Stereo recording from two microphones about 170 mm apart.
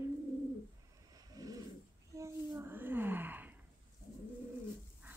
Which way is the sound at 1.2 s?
20° right (ahead or behind).